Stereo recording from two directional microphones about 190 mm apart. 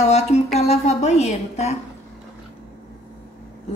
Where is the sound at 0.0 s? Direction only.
35° left (ahead or behind).